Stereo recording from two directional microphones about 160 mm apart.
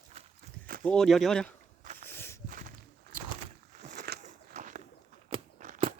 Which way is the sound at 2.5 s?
60° right (ahead or behind).